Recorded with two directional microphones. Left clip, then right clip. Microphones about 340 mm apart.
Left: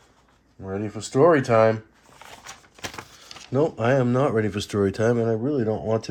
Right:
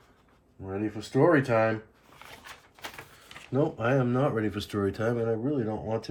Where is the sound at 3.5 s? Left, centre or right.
Left.